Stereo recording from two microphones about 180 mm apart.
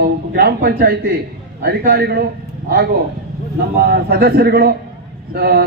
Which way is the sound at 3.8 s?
55° right (ahead or behind).